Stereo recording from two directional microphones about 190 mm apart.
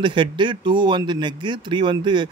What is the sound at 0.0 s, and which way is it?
Speech, 25° right (ahead or behind).